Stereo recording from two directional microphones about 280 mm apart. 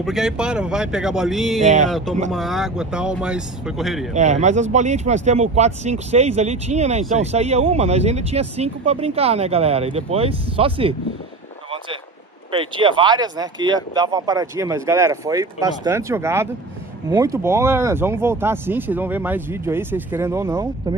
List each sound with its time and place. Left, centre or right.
0.0 s speech: centre
1.6 s speech: right
1.9 s speech: centre
4.1 s speech: right
12.5 s speech: centre